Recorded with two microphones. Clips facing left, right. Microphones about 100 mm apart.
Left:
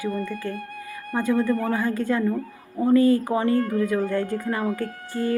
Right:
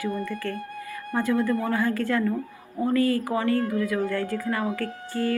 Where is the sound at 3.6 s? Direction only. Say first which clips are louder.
Left 2 dB; 40° left (ahead or behind).